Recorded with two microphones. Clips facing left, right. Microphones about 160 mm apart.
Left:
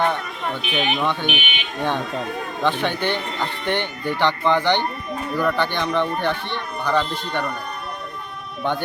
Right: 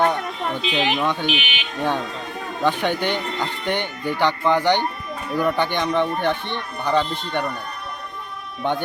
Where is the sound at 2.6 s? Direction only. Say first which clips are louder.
Right 1 dB; 10° right (ahead or behind).